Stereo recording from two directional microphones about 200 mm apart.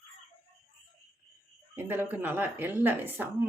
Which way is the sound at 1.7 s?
10° right (ahead or behind).